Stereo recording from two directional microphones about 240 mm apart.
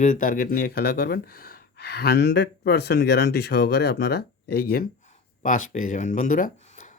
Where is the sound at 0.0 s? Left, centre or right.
Left.